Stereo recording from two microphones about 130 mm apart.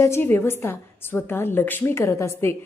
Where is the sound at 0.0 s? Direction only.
20° left (ahead or behind).